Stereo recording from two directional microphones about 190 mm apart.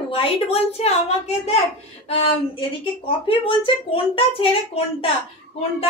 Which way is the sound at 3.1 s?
25° left (ahead or behind).